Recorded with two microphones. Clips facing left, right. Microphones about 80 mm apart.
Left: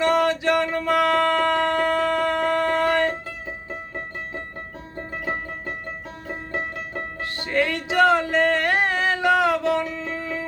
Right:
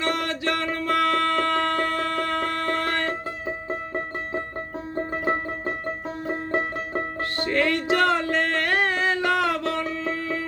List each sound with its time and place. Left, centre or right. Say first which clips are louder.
0.0 s a sound: left 6 dB; centre
3.2 s music: right 4 dB; right
7.3 s music: even; centre